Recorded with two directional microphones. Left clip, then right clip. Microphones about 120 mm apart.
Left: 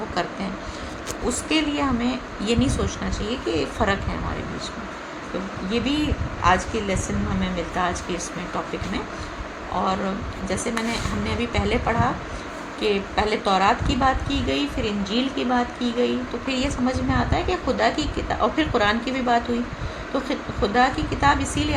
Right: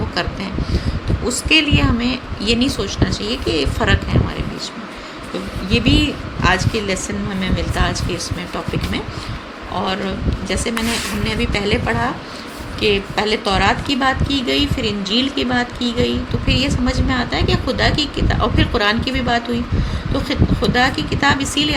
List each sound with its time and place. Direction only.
1.5 s speech: 35° right (ahead or behind)
5.7 s speech: 40° right (ahead or behind)
9.7 s a man's voice: 45° right (ahead or behind)
11.3 s speech: 40° right (ahead or behind)